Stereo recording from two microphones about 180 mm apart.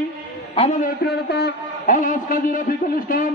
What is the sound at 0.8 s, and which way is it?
A man's voice, 60° left (ahead or behind).